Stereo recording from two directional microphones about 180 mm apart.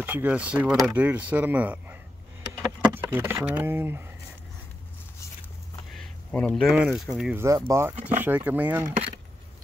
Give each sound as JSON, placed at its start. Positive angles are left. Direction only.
{"t": 0.0, "sound": "speech", "side_deg": -10}
{"t": 5.9, "sound": "speech", "side_deg": 5}
{"t": 7.3, "sound": "speech", "side_deg": -15}